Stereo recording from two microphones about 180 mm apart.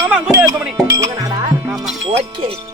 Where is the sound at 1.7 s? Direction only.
Centre (ahead or behind).